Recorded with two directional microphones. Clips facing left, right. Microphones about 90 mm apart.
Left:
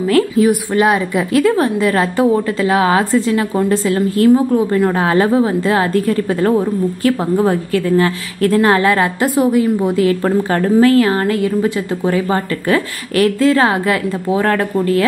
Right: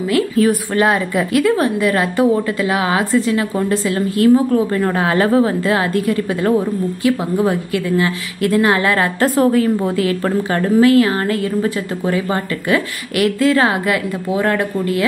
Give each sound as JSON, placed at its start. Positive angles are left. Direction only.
{"t": 0.4, "sound": "a woman's voice", "side_deg": 20}
{"t": 4.3, "sound": "a woman's voice", "side_deg": 20}
{"t": 9.3, "sound": "a woman's voice", "side_deg": 10}
{"t": 9.9, "sound": "a woman's voice", "side_deg": 30}